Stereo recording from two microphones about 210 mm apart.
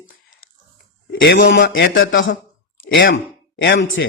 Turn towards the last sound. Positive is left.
turn(degrees=65)  # may be behind; listen again after turning